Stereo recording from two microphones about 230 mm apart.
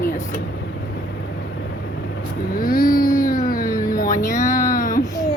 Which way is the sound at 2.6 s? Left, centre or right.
Left.